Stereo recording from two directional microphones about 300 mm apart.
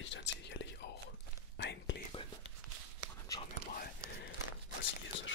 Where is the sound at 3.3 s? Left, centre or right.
Left.